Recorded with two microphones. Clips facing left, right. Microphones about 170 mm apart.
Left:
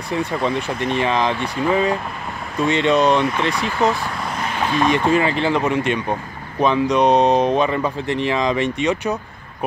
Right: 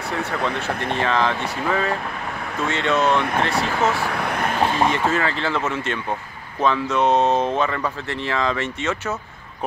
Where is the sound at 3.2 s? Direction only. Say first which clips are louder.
Left 2 dB; 55° right (ahead or behind).